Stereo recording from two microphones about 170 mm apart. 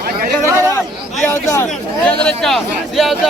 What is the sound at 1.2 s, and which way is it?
Speech, 15° left (ahead or behind).